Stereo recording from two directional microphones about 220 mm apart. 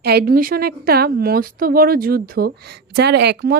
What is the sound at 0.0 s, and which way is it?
Speech, 45° right (ahead or behind).